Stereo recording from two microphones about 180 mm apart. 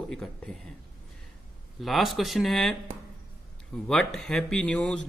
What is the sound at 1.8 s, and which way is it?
Speech, centre (ahead or behind).